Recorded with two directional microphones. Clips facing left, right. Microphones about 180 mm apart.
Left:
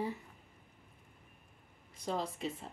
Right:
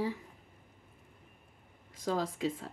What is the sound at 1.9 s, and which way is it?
Speech, 90° right.